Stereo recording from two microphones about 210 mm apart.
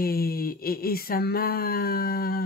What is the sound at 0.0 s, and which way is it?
Speech, 45° left (ahead or behind).